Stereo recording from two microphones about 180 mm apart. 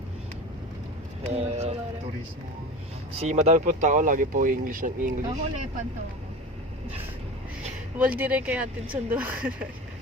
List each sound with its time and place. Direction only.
1.2 s speech: 35° right (ahead or behind)
3.2 s speech: 35° right (ahead or behind)
7.9 s speech: 10° right (ahead or behind)